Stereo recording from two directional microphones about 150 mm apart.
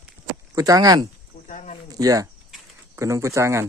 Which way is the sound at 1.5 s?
55° left (ahead or behind).